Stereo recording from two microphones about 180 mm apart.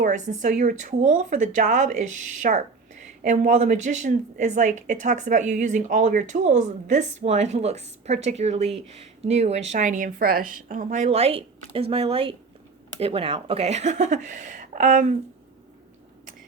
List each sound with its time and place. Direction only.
0.0 s a woman's voice: 45° right (ahead or behind)